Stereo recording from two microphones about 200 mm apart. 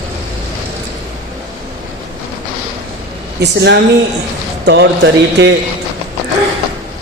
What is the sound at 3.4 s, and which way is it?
A man's voice, 60° right (ahead or behind).